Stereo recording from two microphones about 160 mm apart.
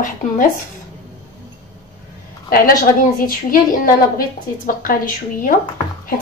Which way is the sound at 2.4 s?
60° left (ahead or behind).